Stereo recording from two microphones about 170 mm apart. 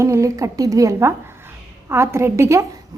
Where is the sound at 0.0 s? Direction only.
15° right (ahead or behind).